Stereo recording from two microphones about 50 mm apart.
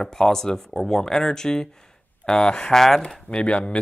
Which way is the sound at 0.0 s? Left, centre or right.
Centre.